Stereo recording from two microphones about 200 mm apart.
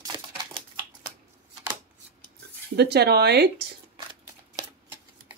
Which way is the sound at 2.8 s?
55° right (ahead or behind).